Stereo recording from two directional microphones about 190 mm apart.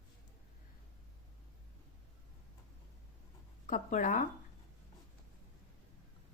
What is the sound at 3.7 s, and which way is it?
Speech, 45° left (ahead or behind).